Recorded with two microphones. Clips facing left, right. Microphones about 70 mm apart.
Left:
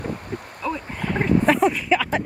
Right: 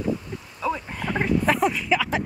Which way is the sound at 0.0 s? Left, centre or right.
Left.